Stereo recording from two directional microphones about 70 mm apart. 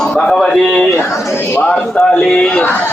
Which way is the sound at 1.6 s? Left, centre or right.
Centre.